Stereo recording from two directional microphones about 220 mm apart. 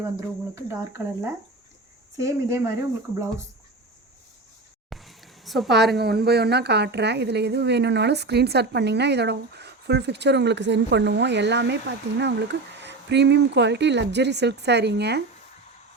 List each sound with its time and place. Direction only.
0.5 s speech: 10° right (ahead or behind)
4.9 s a sound: centre (ahead or behind)
5.9 s a woman's voice: 45° right (ahead or behind)